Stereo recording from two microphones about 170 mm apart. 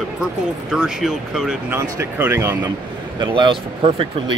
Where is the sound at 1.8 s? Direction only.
15° right (ahead or behind).